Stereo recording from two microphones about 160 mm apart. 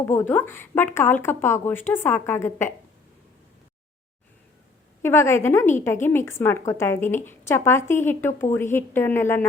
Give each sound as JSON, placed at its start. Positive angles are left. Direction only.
{"t": 0.0, "sound": "speech", "side_deg": 15}
{"t": 5.0, "sound": "speech", "side_deg": 15}